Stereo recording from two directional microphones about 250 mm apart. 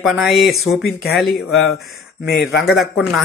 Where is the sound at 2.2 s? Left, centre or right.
Left.